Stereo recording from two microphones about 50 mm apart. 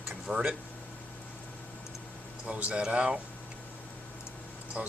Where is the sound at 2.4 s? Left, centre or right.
Right.